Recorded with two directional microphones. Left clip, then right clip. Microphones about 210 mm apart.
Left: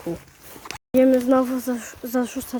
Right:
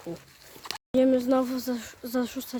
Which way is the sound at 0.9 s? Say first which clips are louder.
Left 6 dB; 5° left (ahead or behind).